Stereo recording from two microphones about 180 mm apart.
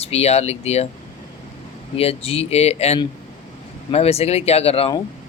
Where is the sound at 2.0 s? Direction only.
35° left (ahead or behind).